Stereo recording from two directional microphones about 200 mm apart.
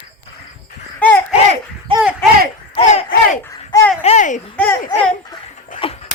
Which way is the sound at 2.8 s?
35° left (ahead or behind).